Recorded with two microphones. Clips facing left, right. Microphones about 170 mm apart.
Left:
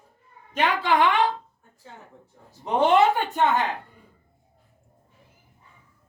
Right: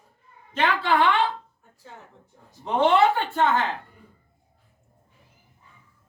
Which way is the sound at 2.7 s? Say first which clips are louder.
Even; 15° left (ahead or behind).